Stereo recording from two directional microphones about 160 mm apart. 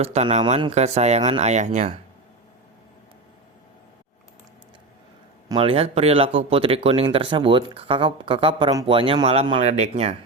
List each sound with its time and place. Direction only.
0.0 s speech: 40° right (ahead or behind)
5.5 s speech: 35° right (ahead or behind)